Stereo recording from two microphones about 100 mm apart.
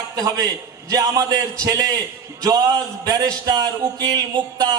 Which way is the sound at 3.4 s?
45° right (ahead or behind).